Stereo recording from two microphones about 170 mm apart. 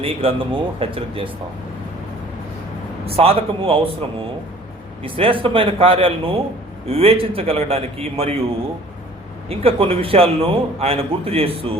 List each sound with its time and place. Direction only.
0.0 s a man's voice: 35° right (ahead or behind)
3.1 s a man's voice: 35° right (ahead or behind)
5.0 s a man's voice: 30° right (ahead or behind)
9.5 s a man's voice: 35° right (ahead or behind)